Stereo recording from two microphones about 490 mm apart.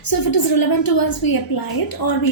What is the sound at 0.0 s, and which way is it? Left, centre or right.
A woman's voice, left.